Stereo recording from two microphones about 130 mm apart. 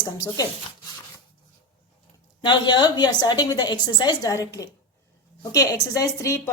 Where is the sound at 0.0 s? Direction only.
30° left (ahead or behind).